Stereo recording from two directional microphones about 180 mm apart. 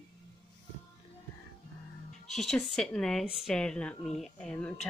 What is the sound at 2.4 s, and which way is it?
Speech, centre (ahead or behind).